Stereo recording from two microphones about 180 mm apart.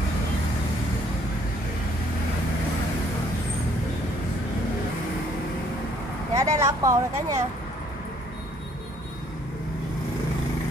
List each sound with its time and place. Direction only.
6.3 s vehicle: 15° right (ahead or behind)